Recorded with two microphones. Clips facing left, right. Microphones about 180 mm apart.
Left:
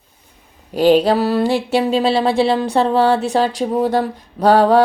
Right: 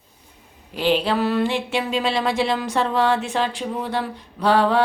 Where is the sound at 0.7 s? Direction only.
40° left (ahead or behind).